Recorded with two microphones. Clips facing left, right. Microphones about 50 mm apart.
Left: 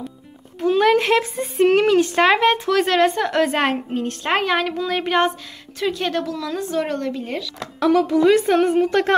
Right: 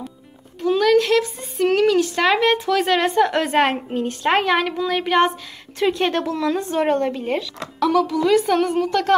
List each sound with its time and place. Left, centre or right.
0.6 s a child's voice: centre
5.8 s speech: centre
7.5 s a woman's voice: centre